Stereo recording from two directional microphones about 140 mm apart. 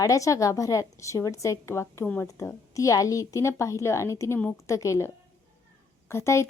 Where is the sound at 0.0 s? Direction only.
25° left (ahead or behind).